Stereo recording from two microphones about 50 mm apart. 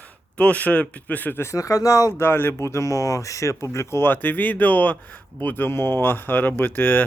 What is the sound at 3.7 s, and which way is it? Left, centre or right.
Speech, left.